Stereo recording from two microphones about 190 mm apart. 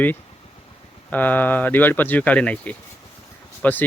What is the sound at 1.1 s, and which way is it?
Speech, 10° left (ahead or behind).